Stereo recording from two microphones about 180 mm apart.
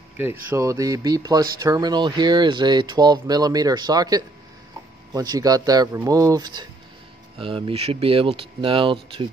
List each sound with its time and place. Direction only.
0.2 s speech: 10° right (ahead or behind); by 9.3 s 30° right (ahead or behind)